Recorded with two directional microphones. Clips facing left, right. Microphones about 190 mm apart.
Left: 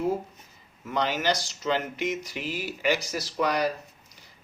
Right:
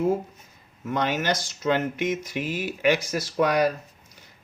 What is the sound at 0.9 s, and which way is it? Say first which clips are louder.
Speech: right 1 dB; 50° right (ahead or behind).